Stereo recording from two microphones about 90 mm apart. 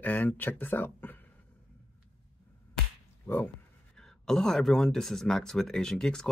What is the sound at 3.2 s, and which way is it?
Speech, 20° left (ahead or behind).